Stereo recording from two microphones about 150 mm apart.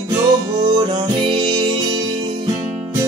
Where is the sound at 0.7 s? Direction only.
30° right (ahead or behind).